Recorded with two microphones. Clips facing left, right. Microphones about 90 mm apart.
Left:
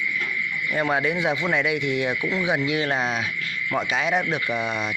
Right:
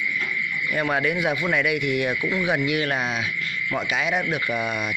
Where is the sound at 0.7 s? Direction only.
25° left (ahead or behind).